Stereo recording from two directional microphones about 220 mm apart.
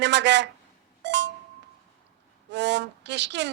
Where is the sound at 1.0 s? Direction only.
55° right (ahead or behind).